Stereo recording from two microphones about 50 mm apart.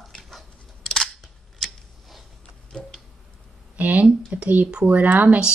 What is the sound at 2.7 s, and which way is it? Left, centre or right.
Tick-tock, centre.